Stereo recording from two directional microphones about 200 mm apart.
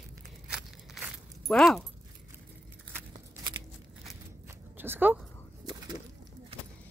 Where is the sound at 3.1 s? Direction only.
25° right (ahead or behind).